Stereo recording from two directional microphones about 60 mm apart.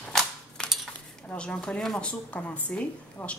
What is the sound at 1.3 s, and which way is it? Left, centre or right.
A woman's voice, centre.